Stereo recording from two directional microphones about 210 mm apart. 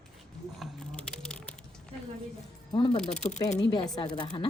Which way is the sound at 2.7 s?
20° left (ahead or behind).